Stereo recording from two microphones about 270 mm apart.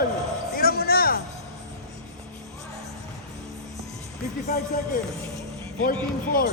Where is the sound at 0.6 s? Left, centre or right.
Left.